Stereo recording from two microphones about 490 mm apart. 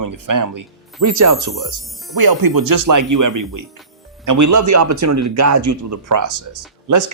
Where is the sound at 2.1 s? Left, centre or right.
Right.